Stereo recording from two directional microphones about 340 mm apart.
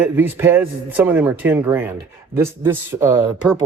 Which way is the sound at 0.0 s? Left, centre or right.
Centre.